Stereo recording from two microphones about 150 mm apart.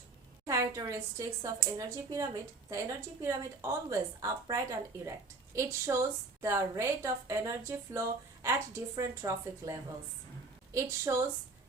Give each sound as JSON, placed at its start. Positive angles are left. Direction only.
{"t": 0.4, "sound": "a woman's voice", "side_deg": -20}